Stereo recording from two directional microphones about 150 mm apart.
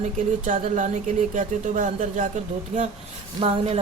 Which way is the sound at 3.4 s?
45° right (ahead or behind).